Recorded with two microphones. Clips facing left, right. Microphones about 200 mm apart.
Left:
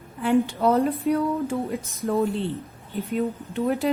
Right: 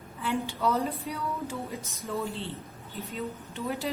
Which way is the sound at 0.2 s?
55° left (ahead or behind).